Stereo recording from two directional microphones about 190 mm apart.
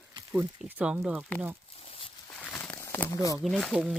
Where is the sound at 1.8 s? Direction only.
30° left (ahead or behind).